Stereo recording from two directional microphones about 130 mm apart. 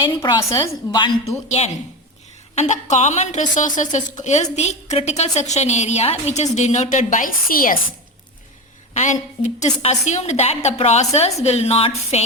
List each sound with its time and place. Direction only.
0.2 s a woman's voice: 25° left (ahead or behind)
2.9 s a woman's voice: 60° left (ahead or behind); by 7.8 s 90° left
8.9 s a woman's voice: 65° left (ahead or behind)